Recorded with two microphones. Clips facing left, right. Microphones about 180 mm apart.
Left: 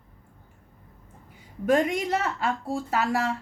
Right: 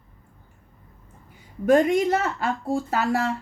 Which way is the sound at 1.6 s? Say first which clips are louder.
Right 5 dB; 45° right (ahead or behind).